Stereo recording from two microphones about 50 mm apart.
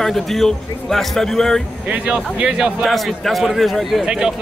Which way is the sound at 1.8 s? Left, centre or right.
Right.